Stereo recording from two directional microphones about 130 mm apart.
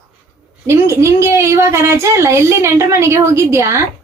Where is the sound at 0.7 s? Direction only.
20° right (ahead or behind).